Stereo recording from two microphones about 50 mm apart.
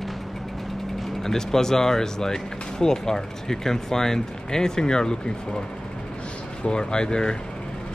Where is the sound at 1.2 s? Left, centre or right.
Centre.